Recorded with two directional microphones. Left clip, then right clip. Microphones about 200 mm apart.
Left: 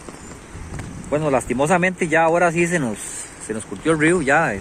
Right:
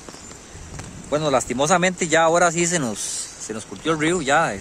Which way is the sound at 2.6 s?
10° right (ahead or behind).